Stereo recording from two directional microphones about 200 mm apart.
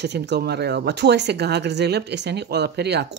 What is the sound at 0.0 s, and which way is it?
Speech, 55° right (ahead or behind).